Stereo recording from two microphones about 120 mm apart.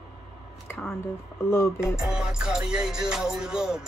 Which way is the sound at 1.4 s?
20° left (ahead or behind).